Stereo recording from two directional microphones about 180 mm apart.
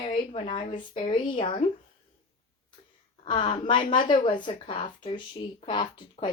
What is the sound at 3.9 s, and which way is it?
A woman's voice, 25° left (ahead or behind).